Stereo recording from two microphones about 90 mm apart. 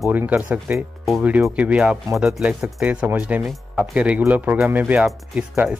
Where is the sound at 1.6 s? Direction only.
15° right (ahead or behind).